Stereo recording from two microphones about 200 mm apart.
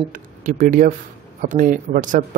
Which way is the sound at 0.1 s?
40° right (ahead or behind).